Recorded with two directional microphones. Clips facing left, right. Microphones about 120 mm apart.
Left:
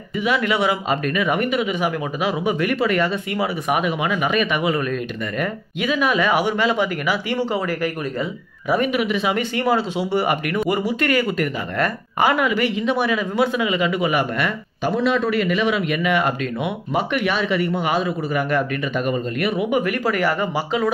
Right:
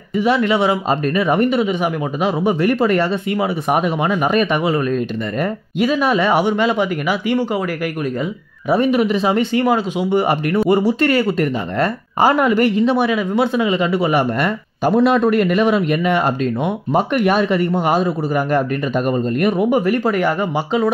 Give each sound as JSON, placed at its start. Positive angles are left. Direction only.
{"t": 0.4, "sound": "speech", "side_deg": -25}
{"t": 3.3, "sound": "speech", "side_deg": -25}
{"t": 3.7, "sound": "speech", "side_deg": -35}
{"t": 8.6, "sound": "speech", "side_deg": -30}
{"t": 9.4, "sound": "speech", "side_deg": -20}
{"t": 10.2, "sound": "speech", "side_deg": -30}
{"t": 12.8, "sound": "speech", "side_deg": -20}
{"t": 13.6, "sound": "speech", "side_deg": -30}
{"t": 14.9, "sound": "speech", "side_deg": -50}
{"t": 19.8, "sound": "speech", "side_deg": -25}